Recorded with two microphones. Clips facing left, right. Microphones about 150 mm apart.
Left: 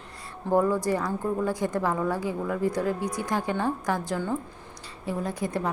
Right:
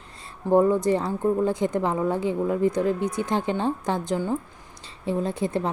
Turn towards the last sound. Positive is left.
turn(degrees=-25)  # may be behind; listen again after turning